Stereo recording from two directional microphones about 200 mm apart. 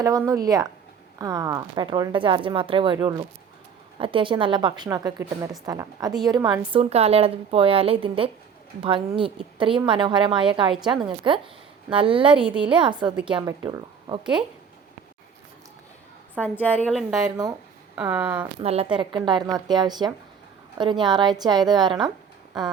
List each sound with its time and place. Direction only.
0.0 s speech: 15° right (ahead or behind)
16.4 s a woman's voice: 5° left (ahead or behind)
18.6 s speech: 30° right (ahead or behind)